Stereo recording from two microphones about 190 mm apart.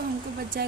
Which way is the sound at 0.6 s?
55° right (ahead or behind).